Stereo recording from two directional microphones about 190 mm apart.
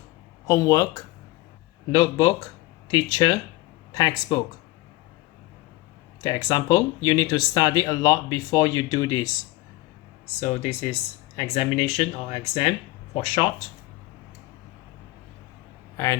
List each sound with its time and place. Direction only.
0.4 s speech: 20° left (ahead or behind)
6.2 s speech: 20° left (ahead or behind)
10.4 s speech: 35° left (ahead or behind)
16.0 s speech: 15° left (ahead or behind)